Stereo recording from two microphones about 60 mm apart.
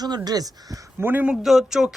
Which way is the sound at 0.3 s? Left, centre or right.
Right.